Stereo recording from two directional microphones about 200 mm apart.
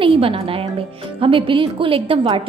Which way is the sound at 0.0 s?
25° right (ahead or behind).